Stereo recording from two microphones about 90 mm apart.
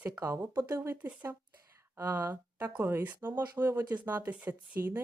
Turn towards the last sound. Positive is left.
turn(degrees=-25)  # may be behind; listen again after turning